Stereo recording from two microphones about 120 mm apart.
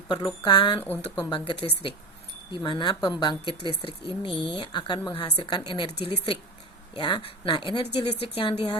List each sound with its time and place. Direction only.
0.1 s speech: 35° left (ahead or behind)
0.9 s speech: 15° left (ahead or behind)
1.3 s speech: 45° left (ahead or behind)